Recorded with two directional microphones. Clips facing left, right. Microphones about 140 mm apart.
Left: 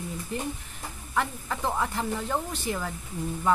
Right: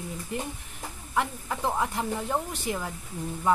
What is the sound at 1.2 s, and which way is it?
Speech, 15° right (ahead or behind).